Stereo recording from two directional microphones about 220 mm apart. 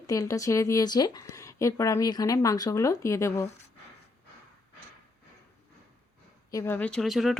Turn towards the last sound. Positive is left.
turn(degrees=0)  # may be behind; listen again after turning